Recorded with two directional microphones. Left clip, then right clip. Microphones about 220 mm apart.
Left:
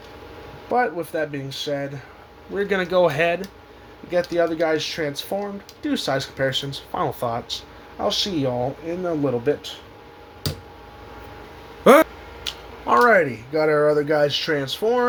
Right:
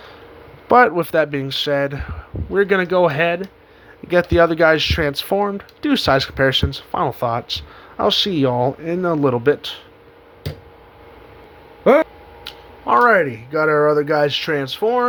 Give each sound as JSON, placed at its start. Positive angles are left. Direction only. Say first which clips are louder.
{"t": 0.7, "sound": "speech", "louder": "right 9 dB", "side_deg": -40}
{"t": 4.1, "sound": "speech", "louder": "right 6 dB", "side_deg": -35}
{"t": 8.0, "sound": "speech", "louder": "right 6 dB", "side_deg": -45}
{"t": 11.8, "sound": "a sound", "louder": "even", "side_deg": -5}
{"t": 12.5, "sound": "speech", "louder": "right 3 dB", "side_deg": -15}